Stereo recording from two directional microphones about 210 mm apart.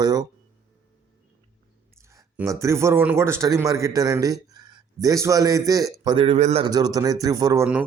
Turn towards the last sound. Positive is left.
turn(degrees=-15)  # may be behind; listen again after turning